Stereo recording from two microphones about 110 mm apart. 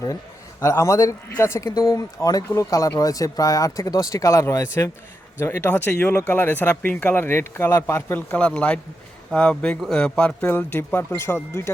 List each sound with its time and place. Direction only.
0.6 s speech: 25° left (ahead or behind)